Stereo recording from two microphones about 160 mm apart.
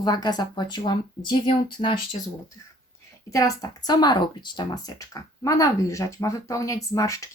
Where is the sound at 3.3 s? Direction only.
20° left (ahead or behind).